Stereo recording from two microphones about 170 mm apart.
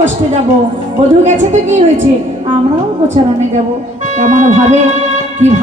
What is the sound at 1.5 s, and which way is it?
Speech, 40° right (ahead or behind).